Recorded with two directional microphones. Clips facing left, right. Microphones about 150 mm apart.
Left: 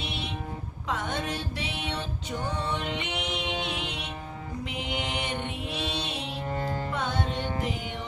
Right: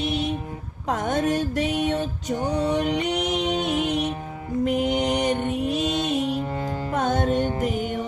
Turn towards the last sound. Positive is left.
turn(degrees=-45)  # may be behind; listen again after turning